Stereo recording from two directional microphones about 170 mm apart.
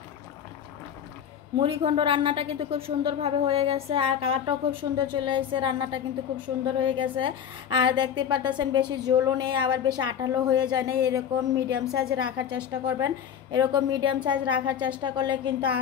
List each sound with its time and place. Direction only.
1.6 s a woman's voice: 30° right (ahead or behind)
12.4 s a woman's voice: 25° right (ahead or behind)